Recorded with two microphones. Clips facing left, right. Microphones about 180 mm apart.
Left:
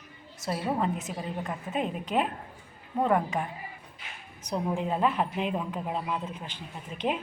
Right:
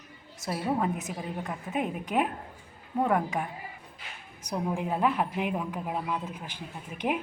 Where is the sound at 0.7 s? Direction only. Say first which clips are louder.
Right 1 dB; 5° right (ahead or behind).